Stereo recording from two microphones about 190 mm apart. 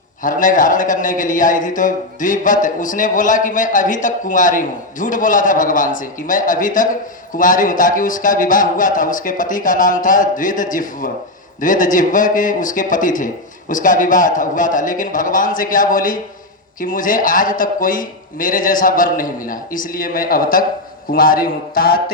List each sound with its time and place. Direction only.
0.2 s a man's voice: 45° left (ahead or behind)